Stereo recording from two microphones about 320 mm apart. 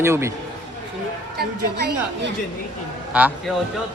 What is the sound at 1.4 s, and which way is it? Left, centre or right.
Speech, right.